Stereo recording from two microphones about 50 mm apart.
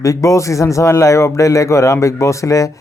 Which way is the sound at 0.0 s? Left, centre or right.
Left.